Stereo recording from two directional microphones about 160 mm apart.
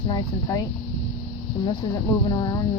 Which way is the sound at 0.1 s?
25° left (ahead or behind).